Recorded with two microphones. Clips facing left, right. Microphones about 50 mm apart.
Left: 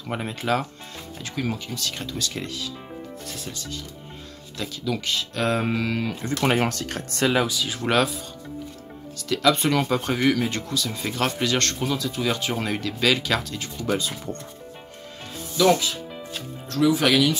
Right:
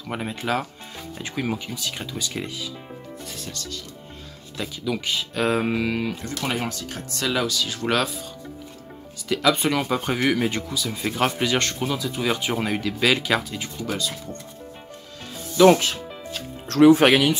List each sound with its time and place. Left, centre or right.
0.1 s speech: centre
1.1 s speech: centre
3.3 s speech: centre
4.6 s speech: centre
6.6 s speech: left
7.2 s speech: left
7.4 s speech: centre
9.3 s speech: centre
13.9 s speech: left
15.5 s speech: right
16.6 s speech: right
16.9 s speech: right